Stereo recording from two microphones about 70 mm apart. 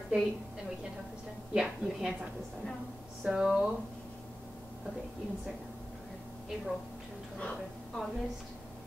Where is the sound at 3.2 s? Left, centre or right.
Centre.